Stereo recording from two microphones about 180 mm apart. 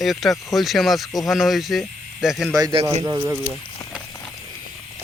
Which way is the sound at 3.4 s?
5° right (ahead or behind).